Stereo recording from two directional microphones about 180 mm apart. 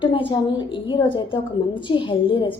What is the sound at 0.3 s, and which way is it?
A woman's voice, 25° left (ahead or behind).